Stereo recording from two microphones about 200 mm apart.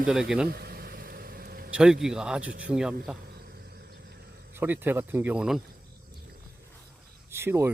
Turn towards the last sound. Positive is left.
turn(degrees=-10)  # may be behind; listen again after turning